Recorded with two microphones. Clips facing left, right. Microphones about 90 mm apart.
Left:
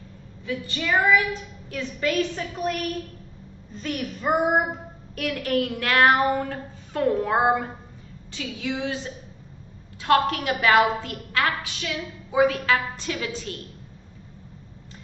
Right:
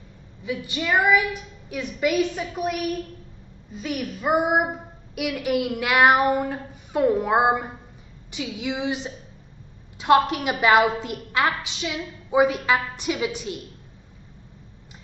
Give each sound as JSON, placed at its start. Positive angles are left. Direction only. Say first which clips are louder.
{"t": 0.4, "sound": "a woman's voice", "louder": "right 1 dB", "side_deg": -15}
{"t": 3.7, "sound": "child singing", "louder": "right 1 dB", "side_deg": -5}
{"t": 5.1, "sound": "a woman's voice", "louder": "right 1 dB", "side_deg": -10}